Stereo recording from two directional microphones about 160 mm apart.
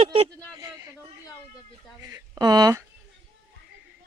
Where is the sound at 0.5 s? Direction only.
20° right (ahead or behind).